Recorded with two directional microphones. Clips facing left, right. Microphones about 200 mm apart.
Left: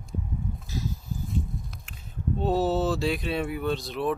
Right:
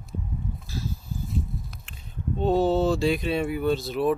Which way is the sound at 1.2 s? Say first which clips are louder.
Right 1 dB; centre (ahead or behind).